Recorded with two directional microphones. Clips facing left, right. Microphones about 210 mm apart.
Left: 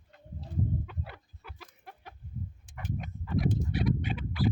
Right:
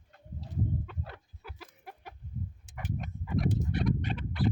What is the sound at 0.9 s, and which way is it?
Chicken, centre (ahead or behind).